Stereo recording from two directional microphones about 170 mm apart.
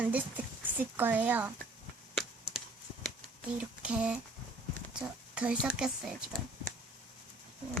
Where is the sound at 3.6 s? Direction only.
5° right (ahead or behind).